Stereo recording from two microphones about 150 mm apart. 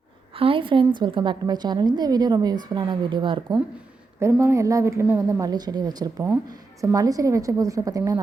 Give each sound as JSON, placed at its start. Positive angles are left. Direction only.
{"t": 0.3, "sound": "a woman's voice", "side_deg": -35}
{"t": 4.2, "sound": "a woman's voice", "side_deg": -15}